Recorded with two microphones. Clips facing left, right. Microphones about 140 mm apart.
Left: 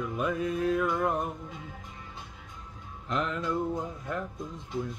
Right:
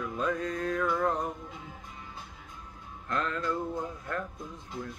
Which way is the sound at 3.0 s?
15° left (ahead or behind).